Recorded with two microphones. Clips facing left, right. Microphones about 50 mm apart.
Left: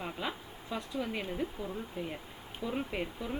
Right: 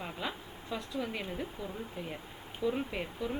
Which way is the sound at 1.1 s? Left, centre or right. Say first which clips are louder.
Left 2 dB; centre.